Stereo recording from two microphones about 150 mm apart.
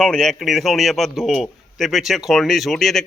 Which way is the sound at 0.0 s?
Centre (ahead or behind).